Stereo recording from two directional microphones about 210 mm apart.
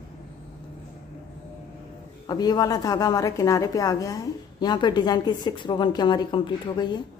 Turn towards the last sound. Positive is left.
turn(degrees=20)  # may be behind; listen again after turning